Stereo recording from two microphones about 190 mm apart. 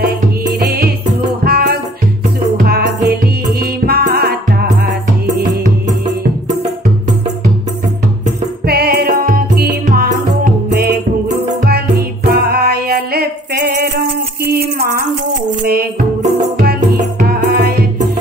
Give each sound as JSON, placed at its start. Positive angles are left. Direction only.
{"t": 1.4, "sound": "music", "side_deg": -55}
{"t": 8.6, "sound": "music", "side_deg": -55}